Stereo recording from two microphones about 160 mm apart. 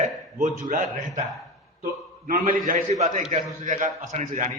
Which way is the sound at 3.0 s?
45° right (ahead or behind).